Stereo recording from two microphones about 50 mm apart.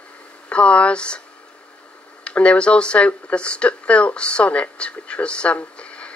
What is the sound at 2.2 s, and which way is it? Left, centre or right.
Speech, left.